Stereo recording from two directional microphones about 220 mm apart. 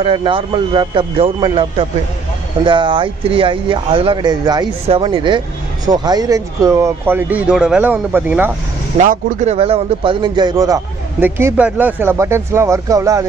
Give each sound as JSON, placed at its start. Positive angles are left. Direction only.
{"t": 0.0, "sound": "a man's voice", "side_deg": -25}
{"t": 8.9, "sound": "a man's voice", "side_deg": -35}